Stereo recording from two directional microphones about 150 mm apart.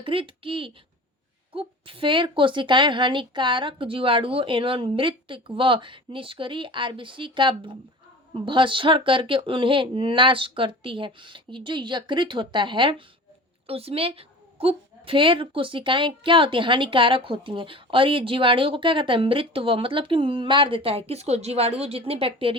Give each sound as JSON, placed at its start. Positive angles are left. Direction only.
{"t": 0.0, "sound": "a woman's voice", "side_deg": -35}